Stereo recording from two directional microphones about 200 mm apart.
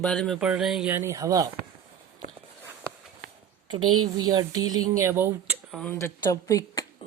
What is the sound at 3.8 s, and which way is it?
Speech, 90° right.